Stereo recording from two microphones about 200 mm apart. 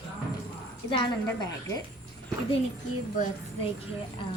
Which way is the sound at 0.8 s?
25° left (ahead or behind).